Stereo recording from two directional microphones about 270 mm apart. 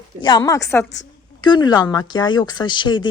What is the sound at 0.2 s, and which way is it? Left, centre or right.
Speech, centre.